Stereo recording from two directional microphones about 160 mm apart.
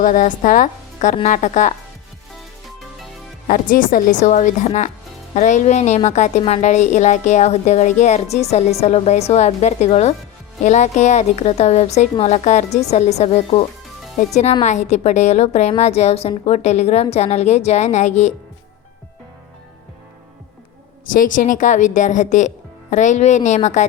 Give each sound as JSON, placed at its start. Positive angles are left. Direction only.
{"t": 0.0, "sound": "a woman's voice", "side_deg": 55}
{"t": 3.4, "sound": "a woman's voice", "side_deg": 60}
{"t": 21.1, "sound": "a woman's voice", "side_deg": 55}